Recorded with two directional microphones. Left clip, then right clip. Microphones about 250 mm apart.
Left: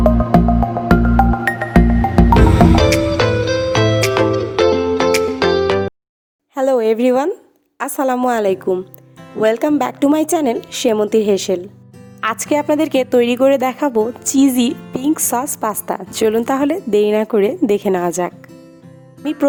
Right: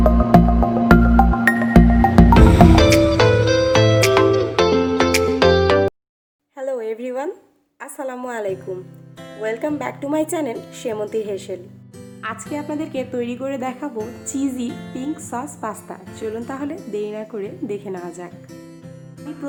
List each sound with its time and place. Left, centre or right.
0.0 s music: centre
6.5 s a sound: left
7.8 s a woman's voice: left